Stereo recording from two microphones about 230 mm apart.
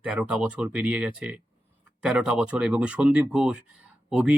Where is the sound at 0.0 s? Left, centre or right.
Centre.